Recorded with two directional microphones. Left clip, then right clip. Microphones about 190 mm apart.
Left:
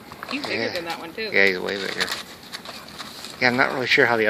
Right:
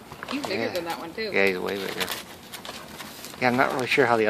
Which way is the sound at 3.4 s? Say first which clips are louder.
Left 3 dB; centre (ahead or behind).